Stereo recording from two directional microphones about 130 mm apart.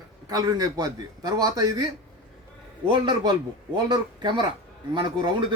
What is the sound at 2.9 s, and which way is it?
Speech, 35° right (ahead or behind).